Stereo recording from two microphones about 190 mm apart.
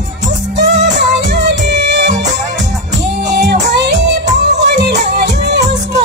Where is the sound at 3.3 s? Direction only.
60° right (ahead or behind).